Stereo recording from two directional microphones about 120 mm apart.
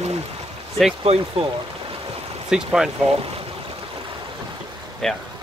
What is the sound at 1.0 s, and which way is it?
Speech, 55° right (ahead or behind).